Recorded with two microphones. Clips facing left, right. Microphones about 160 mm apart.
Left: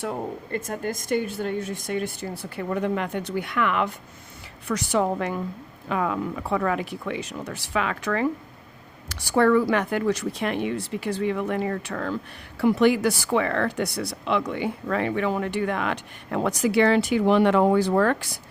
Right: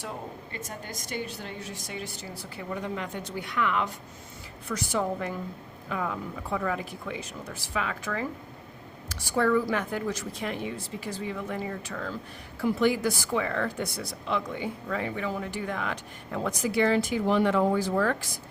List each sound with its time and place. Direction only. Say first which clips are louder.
0.5 s a woman's voice: left 13 dB; 55° left (ahead or behind)
4.7 s speech: left 5 dB; 75° left (ahead or behind)